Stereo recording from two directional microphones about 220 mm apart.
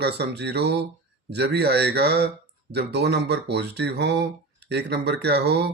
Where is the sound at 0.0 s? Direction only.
50° right (ahead or behind).